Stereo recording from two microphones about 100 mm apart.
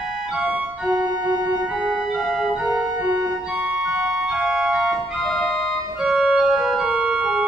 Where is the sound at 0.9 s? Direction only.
45° right (ahead or behind).